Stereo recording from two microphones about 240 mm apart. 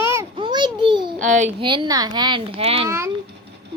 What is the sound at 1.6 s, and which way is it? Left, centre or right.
Speech, centre.